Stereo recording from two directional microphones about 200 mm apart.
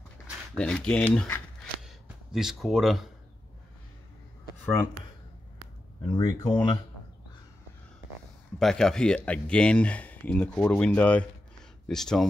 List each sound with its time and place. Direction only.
0.6 s speech: 5° left (ahead or behind)
6.1 s speech: 25° left (ahead or behind)
8.5 s speech: centre (ahead or behind)